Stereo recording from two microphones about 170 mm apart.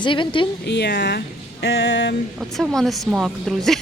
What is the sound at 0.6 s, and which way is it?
Speech, 80° left.